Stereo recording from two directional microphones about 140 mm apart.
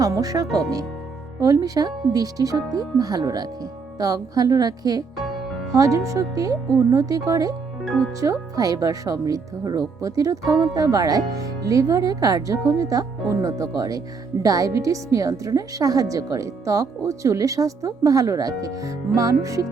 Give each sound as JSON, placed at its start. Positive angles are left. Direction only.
{"t": 0.0, "sound": "a woman's voice", "side_deg": -25}
{"t": 0.4, "sound": "speech", "side_deg": 0}
{"t": 1.4, "sound": "a woman's voice", "side_deg": -25}
{"t": 5.1, "sound": "music", "side_deg": 0}
{"t": 5.7, "sound": "a woman's voice", "side_deg": -25}
{"t": 7.9, "sound": "speech", "side_deg": 5}
{"t": 8.2, "sound": "a woman's voice", "side_deg": -25}